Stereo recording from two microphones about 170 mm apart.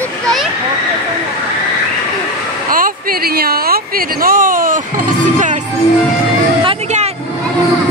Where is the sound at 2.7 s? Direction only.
55° right (ahead or behind).